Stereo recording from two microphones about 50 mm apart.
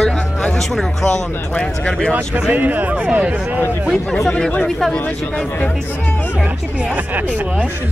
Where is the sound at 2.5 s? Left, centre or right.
Right.